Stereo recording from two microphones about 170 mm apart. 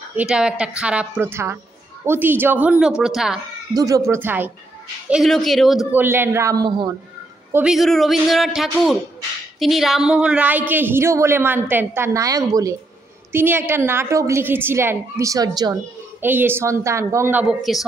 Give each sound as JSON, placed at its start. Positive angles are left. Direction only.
{"t": 0.1, "sound": "a woman's voice", "side_deg": -5}
{"t": 3.7, "sound": "a woman's voice", "side_deg": -20}
{"t": 5.1, "sound": "a woman's voice", "side_deg": 0}
{"t": 7.5, "sound": "a woman's voice", "side_deg": -5}
{"t": 16.2, "sound": "a woman's voice", "side_deg": -10}